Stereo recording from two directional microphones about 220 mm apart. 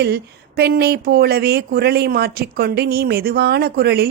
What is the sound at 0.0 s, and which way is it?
A woman's voice, 45° right (ahead or behind).